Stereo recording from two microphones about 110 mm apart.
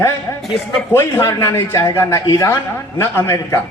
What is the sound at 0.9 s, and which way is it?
A man's voice, 25° left (ahead or behind).